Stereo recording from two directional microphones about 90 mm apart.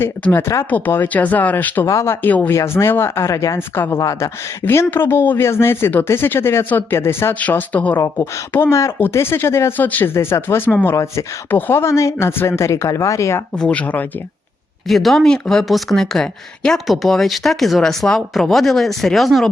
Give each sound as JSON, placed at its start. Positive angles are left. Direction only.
{"t": 0.0, "sound": "speech", "side_deg": 25}
{"t": 1.9, "sound": "speech", "side_deg": 35}
{"t": 2.2, "sound": "speech", "side_deg": 15}
{"t": 2.5, "sound": "speech", "side_deg": 30}
{"t": 3.8, "sound": "speech", "side_deg": 25}
{"t": 4.0, "sound": "speech", "side_deg": 35}
{"t": 4.6, "sound": "speech", "side_deg": 25}
{"t": 10.9, "sound": "speech", "side_deg": 35}
{"t": 13.6, "sound": "speech", "side_deg": 15}
{"t": 14.8, "sound": "speech", "side_deg": 0}